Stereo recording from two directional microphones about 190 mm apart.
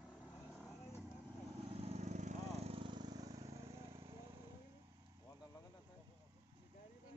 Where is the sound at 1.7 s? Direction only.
35° right (ahead or behind).